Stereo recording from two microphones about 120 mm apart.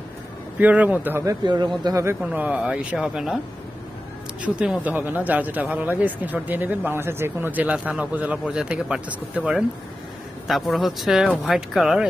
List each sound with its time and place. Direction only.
0.6 s speech: 15° right (ahead or behind)
1.2 s speech: 35° right (ahead or behind)
2.3 s speech: 10° right (ahead or behind)
4.6 s speech: 10° right (ahead or behind)